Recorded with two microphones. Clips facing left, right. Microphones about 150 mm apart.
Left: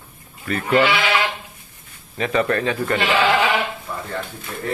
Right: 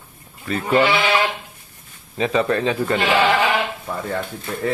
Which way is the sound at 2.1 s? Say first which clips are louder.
Right 1 dB; 20° right (ahead or behind).